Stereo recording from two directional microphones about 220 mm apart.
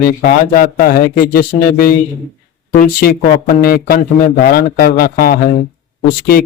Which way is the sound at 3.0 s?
40° left (ahead or behind).